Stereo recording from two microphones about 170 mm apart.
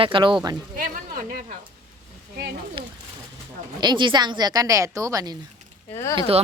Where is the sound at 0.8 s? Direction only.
55° right (ahead or behind).